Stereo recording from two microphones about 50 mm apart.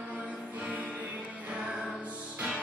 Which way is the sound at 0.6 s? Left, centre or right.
Right.